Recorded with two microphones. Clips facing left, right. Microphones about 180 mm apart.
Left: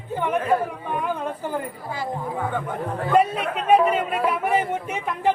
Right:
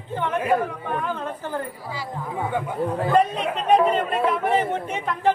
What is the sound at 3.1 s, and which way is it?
Speech, 5° left (ahead or behind).